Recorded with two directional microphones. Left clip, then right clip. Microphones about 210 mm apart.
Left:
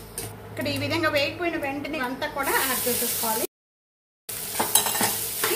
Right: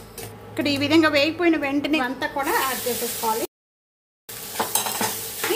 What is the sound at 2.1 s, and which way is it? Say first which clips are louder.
Speech: right 2 dB; 35° right (ahead or behind).